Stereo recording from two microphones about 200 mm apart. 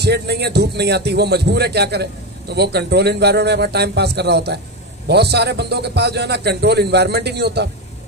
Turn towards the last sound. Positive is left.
turn(degrees=-55)  # may be behind; listen again after turning